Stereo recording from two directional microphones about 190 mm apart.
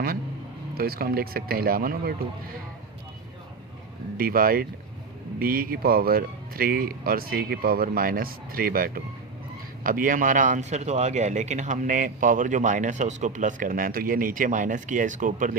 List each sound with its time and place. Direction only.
0.8 s speech: 55° right (ahead or behind)
4.2 s speech: 50° right (ahead or behind)